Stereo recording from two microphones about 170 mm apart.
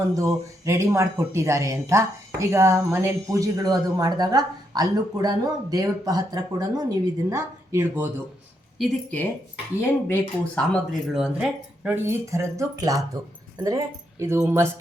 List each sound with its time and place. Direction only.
0.1 s a woman's voice: 15° right (ahead or behind)
8.8 s speech: 5° left (ahead or behind); by 14.7 s 15° right (ahead or behind)